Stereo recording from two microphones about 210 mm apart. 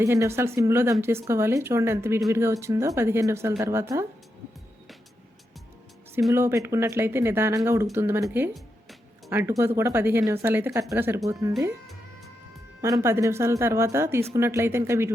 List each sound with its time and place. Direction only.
0.0 s speech: 15° right (ahead or behind)
6.3 s speech: 15° right (ahead or behind)
7.9 s music: 10° right (ahead or behind)
9.3 s speech: 10° right (ahead or behind)
12.8 s speech: 15° right (ahead or behind)